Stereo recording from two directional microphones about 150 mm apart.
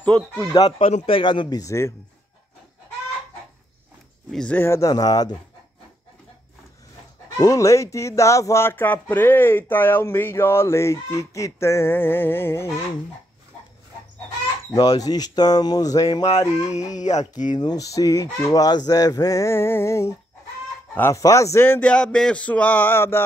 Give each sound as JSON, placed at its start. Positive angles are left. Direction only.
{"t": 0.4, "sound": "speech", "side_deg": 25}
{"t": 0.7, "sound": "speech", "side_deg": 45}
{"t": 1.6, "sound": "speech", "side_deg": 20}
{"t": 4.3, "sound": "speech", "side_deg": 5}
{"t": 7.3, "sound": "speech", "side_deg": 20}
{"t": 14.7, "sound": "speech", "side_deg": 25}
{"t": 16.3, "sound": "speech", "side_deg": 45}
{"t": 17.6, "sound": "speech", "side_deg": 25}